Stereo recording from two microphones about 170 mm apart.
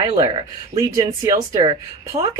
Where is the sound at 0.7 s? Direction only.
20° right (ahead or behind).